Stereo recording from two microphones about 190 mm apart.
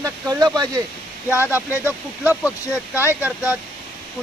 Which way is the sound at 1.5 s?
10° right (ahead or behind).